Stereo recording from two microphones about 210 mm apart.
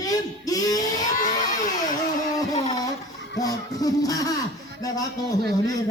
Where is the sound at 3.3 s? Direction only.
15° left (ahead or behind).